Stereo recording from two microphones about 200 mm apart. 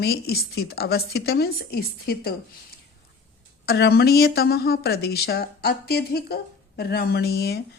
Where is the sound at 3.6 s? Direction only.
55° left (ahead or behind).